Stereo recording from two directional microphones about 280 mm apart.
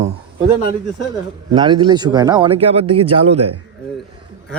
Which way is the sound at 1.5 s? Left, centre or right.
Centre.